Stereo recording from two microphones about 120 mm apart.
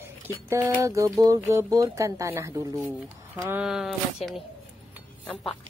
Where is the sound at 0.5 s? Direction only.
20° right (ahead or behind).